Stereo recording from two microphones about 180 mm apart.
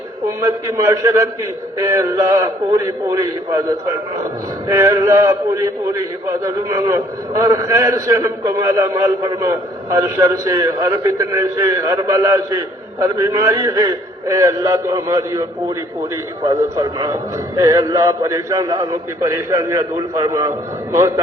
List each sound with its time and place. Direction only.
0.3 s a man's voice: 20° right (ahead or behind)